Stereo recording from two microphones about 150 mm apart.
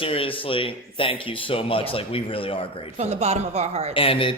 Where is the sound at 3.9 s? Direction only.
35° left (ahead or behind).